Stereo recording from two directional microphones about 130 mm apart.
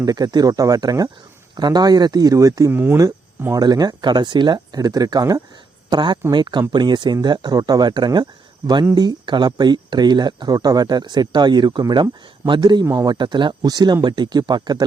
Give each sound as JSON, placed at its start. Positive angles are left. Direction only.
{"t": 0.0, "sound": "speech", "side_deg": -30}
{"t": 3.4, "sound": "speech", "side_deg": -30}
{"t": 12.8, "sound": "speech", "side_deg": -25}
{"t": 13.1, "sound": "speech", "side_deg": -35}